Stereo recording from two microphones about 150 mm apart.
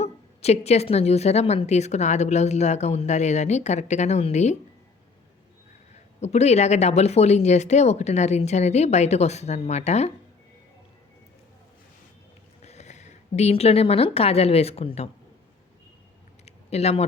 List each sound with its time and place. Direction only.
0.0 s a woman's voice: 45° left (ahead or behind)
6.1 s a woman's voice: 45° left (ahead or behind)
12.6 s speech: 50° left (ahead or behind)
16.5 s a sound: 45° left (ahead or behind)